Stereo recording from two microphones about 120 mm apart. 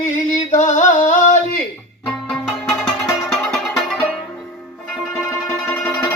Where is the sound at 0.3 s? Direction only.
90° left.